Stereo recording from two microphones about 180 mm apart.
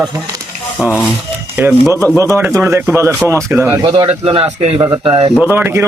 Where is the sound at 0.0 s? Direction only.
20° right (ahead or behind).